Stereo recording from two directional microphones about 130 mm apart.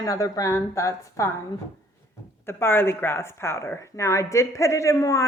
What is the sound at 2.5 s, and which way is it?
A woman's voice, 20° left (ahead or behind).